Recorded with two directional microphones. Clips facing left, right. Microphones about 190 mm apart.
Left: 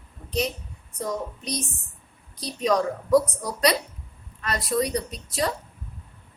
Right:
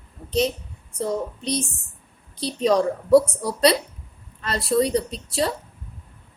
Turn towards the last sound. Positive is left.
turn(degrees=-30)  # may be behind; listen again after turning